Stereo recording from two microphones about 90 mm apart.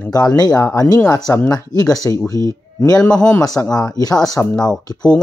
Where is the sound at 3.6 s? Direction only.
45° left (ahead or behind).